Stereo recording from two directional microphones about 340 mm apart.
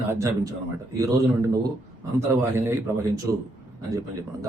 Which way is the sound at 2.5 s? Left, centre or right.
Centre.